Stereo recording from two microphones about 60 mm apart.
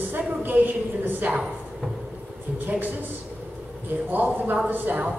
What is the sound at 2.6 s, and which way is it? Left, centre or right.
Speech, right.